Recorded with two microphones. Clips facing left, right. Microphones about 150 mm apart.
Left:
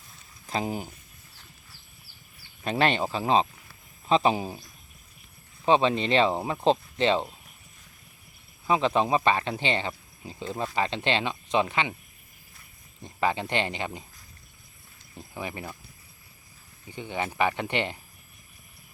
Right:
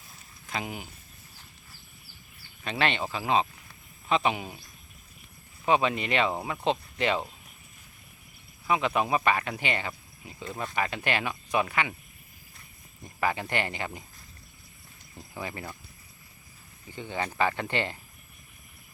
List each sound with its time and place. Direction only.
0.4 s speech: 35° left (ahead or behind)
2.6 s speech: 40° left (ahead or behind)
5.6 s speech: 30° left (ahead or behind)
8.6 s speech: 30° left (ahead or behind)
13.0 s speech: 25° left (ahead or behind)
15.2 s speech: 20° left (ahead or behind)
16.9 s speech: 15° left (ahead or behind)